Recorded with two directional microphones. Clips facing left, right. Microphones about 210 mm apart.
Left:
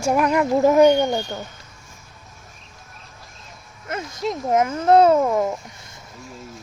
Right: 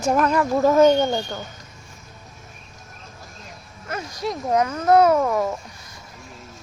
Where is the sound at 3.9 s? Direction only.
25° left (ahead or behind).